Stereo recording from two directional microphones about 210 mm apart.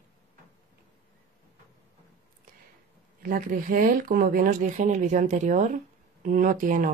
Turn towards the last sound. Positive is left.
turn(degrees=-40)  # may be behind; listen again after turning